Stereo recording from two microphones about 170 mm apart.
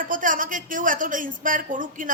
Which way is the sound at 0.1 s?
50° right (ahead or behind).